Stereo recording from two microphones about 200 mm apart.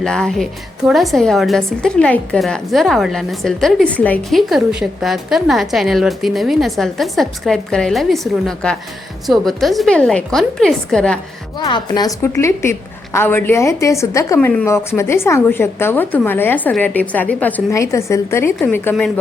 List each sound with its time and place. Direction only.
0.0 s a woman's voice: 5° left (ahead or behind)
11.5 s a woman's voice: 20° left (ahead or behind)